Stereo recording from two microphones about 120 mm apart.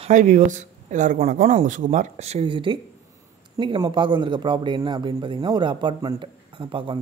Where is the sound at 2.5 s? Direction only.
45° right (ahead or behind).